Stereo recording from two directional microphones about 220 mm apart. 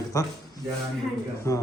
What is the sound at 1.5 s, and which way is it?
Speech, 15° left (ahead or behind).